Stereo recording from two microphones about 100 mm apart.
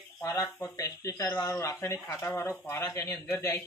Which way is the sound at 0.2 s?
35° left (ahead or behind).